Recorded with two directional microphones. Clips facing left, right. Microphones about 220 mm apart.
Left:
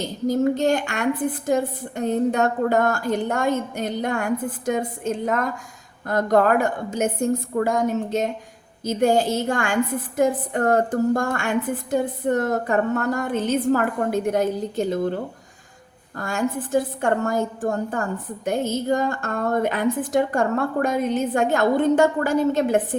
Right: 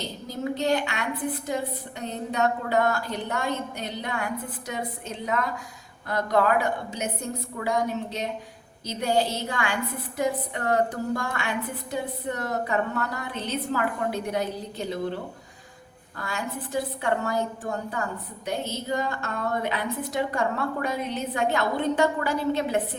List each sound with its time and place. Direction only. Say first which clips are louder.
0.0 s a woman's voice: left 11 dB; 45° left (ahead or behind)